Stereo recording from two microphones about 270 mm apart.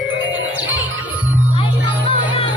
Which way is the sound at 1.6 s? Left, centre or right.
Left.